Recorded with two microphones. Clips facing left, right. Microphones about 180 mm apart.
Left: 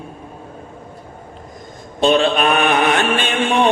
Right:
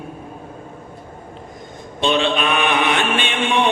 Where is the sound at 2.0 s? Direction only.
40° left (ahead or behind).